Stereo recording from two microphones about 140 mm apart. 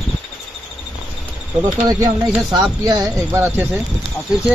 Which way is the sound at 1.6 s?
25° right (ahead or behind).